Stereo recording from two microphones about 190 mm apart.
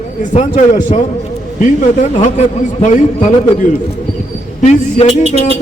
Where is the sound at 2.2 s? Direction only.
40° left (ahead or behind).